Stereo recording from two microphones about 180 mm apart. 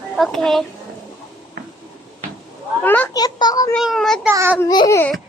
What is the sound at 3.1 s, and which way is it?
Speech, 20° left (ahead or behind).